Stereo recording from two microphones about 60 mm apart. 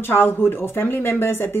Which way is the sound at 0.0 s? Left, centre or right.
Left.